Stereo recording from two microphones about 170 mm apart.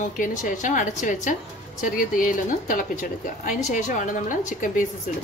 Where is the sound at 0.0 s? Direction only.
50° left (ahead or behind).